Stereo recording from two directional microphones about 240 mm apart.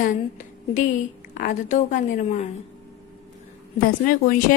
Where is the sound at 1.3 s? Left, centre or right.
Left.